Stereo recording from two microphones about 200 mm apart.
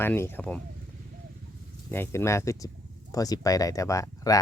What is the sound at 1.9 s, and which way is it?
Speech, 10° left (ahead or behind).